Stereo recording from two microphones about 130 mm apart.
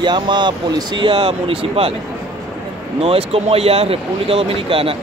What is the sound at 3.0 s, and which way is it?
Speech, 50° right (ahead or behind).